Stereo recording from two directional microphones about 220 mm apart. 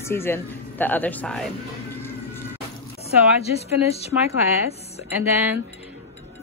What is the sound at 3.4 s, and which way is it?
Speech, 30° left (ahead or behind).